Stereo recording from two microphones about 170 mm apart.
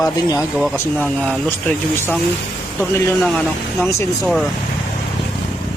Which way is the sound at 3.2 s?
5° left (ahead or behind).